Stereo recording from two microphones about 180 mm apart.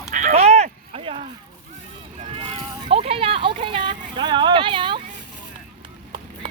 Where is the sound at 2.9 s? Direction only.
30° right (ahead or behind).